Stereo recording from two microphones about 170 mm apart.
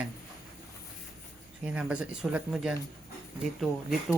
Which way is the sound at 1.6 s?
5° right (ahead or behind).